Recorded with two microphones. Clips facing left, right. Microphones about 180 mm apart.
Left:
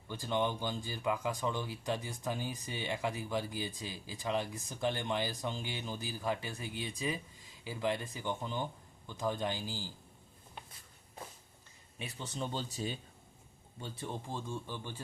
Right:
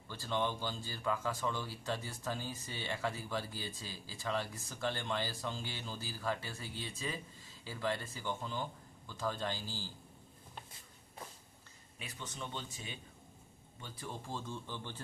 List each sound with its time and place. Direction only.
0.1 s speech: 15° left (ahead or behind)
11.9 s speech: 30° left (ahead or behind); by 15.0 s 15° left (ahead or behind)